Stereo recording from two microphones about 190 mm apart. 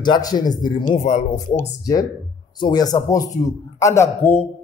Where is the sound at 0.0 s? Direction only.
20° left (ahead or behind).